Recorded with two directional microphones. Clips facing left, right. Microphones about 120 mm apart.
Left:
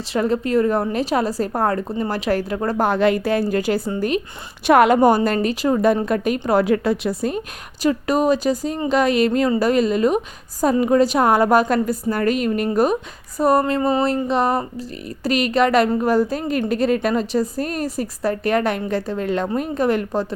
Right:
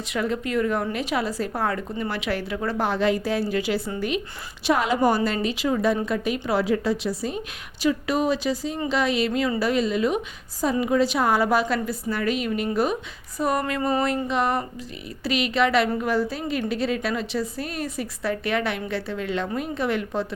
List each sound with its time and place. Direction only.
0.0 s a woman's voice: 35° left (ahead or behind)
4.6 s a woman's voice: 60° left (ahead or behind); by 20.2 s 45° left (ahead or behind)